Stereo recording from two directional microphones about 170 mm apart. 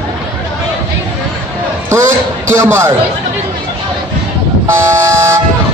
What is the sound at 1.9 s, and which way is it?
Speech, 15° right (ahead or behind).